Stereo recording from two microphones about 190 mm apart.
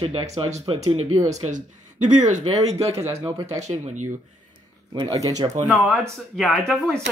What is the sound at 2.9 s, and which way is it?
Speech, 15° right (ahead or behind).